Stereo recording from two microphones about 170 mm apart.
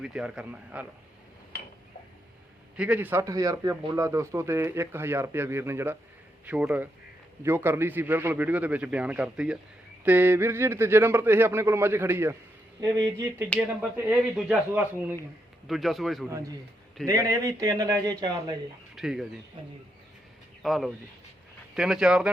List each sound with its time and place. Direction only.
0.0 s a man's voice: 5° right (ahead or behind)
2.7 s a man's voice: 10° right (ahead or behind)
13.6 s a man's voice: 10° right (ahead or behind)
15.6 s a man's voice: centre (ahead or behind)
17.1 s speech: 20° right (ahead or behind)
18.9 s a man's voice: centre (ahead or behind)
20.6 s a man's voice: centre (ahead or behind)